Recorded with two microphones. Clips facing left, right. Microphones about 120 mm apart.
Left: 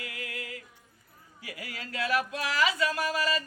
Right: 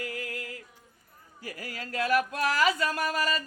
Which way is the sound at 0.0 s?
40° right (ahead or behind).